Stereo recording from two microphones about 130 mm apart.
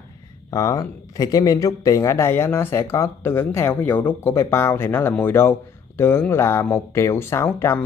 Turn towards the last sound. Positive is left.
turn(degrees=20)  # may be behind; listen again after turning